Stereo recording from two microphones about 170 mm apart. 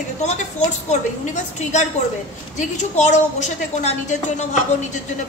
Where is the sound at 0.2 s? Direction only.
45° left (ahead or behind).